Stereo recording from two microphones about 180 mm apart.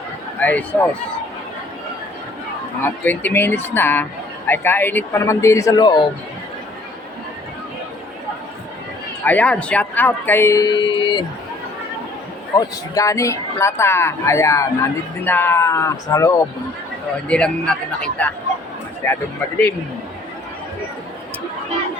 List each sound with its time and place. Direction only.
0.3 s speech: 10° left (ahead or behind)
2.8 s speech: 10° left (ahead or behind)
9.2 s speech: 10° left (ahead or behind); by 11.3 s 25° left (ahead or behind)
12.5 s speech: 20° left (ahead or behind)
17.2 s speech: 5° left (ahead or behind)